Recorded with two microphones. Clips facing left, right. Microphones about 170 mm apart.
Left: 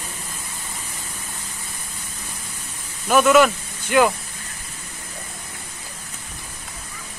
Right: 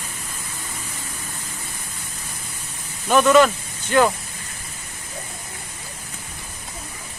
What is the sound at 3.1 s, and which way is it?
Speech, 5° left (ahead or behind).